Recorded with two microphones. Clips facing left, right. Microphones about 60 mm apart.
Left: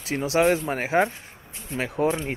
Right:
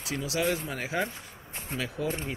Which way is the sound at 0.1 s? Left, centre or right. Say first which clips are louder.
Left 8 dB; left.